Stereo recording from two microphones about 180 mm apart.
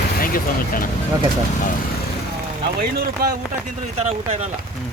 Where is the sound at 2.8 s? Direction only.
55° right (ahead or behind).